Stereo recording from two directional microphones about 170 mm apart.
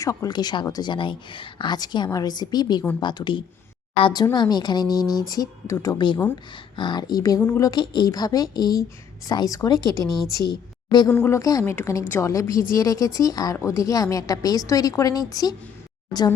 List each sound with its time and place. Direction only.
0.0 s speech: 20° left (ahead or behind)
6.7 s speech: 30° left (ahead or behind)
10.1 s a woman's voice: centre (ahead or behind)
10.3 s speech: 25° left (ahead or behind)